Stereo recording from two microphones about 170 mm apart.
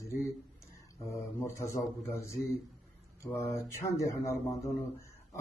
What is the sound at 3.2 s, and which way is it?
Mantra, 15° left (ahead or behind).